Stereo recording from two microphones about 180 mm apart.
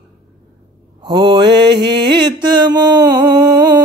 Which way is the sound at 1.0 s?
25° right (ahead or behind).